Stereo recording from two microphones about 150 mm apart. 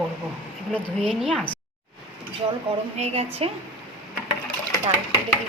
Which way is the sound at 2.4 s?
30° right (ahead or behind).